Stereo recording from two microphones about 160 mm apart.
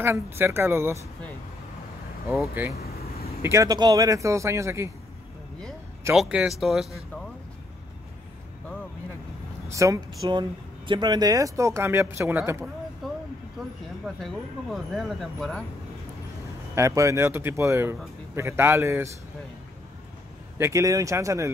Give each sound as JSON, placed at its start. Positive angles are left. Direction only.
{"t": 0.0, "sound": "speech", "side_deg": -15}
{"t": 2.5, "sound": "speech", "side_deg": -10}
{"t": 3.4, "sound": "speech", "side_deg": -20}
{"t": 6.1, "sound": "speech", "side_deg": -5}
{"t": 9.7, "sound": "speech", "side_deg": -20}
{"t": 13.0, "sound": "vehicle", "side_deg": 0}
{"t": 13.6, "sound": "a sound", "side_deg": 0}
{"t": 14.0, "sound": "speech", "side_deg": 0}
{"t": 16.7, "sound": "speech", "side_deg": -20}
{"t": 20.5, "sound": "speech", "side_deg": -15}